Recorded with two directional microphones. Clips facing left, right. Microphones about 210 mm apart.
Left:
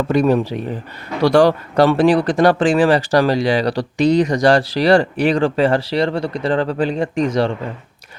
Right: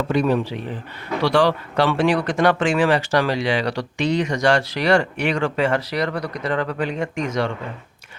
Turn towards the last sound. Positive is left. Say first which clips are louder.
# left 6 dB
turn(degrees=35)  # may be behind; listen again after turning